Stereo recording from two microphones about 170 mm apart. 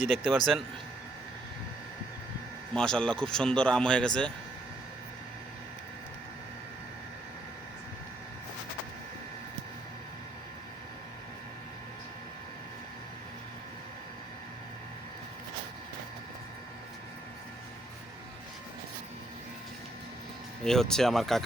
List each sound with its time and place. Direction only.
0.3 s speech: centre (ahead or behind)
2.7 s speech: 5° left (ahead or behind)
20.7 s speech: 5° left (ahead or behind)